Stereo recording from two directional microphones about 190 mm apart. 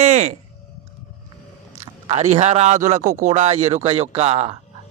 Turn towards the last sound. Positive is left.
turn(degrees=-30)  # may be behind; listen again after turning